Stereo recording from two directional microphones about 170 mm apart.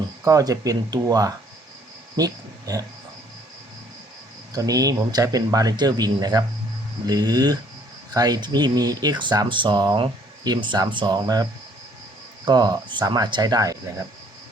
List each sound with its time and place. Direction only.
0.3 s speech: 20° right (ahead or behind)
4.5 s speech: 20° right (ahead or behind)
12.5 s speech: 25° right (ahead or behind)